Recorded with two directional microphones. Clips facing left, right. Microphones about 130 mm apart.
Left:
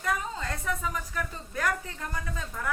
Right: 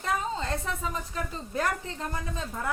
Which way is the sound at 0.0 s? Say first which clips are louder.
Right 2 dB; 25° right (ahead or behind).